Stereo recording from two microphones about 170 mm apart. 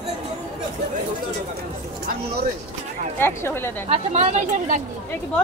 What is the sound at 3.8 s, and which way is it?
Speech, 40° right (ahead or behind).